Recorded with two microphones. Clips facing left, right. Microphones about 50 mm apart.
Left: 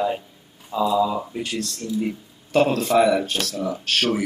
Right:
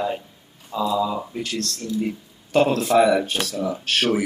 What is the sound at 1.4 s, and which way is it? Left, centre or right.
Speech, centre.